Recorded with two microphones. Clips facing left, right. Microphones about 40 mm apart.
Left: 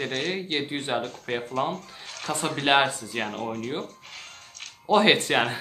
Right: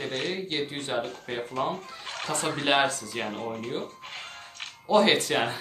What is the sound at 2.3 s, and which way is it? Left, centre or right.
Speech, left.